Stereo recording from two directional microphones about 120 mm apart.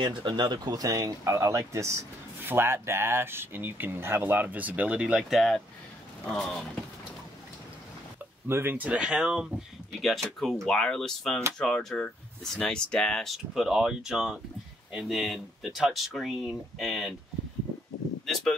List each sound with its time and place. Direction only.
0.0 s speech: 40° right (ahead or behind); by 6.6 s 5° left (ahead or behind)
8.5 s speech: 20° right (ahead or behind); by 17.1 s centre (ahead or behind)
18.2 s a sound: 5° left (ahead or behind)